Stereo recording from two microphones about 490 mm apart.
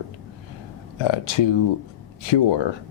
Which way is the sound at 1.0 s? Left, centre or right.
Left.